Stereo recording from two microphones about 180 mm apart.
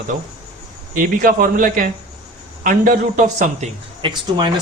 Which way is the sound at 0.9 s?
50° right (ahead or behind).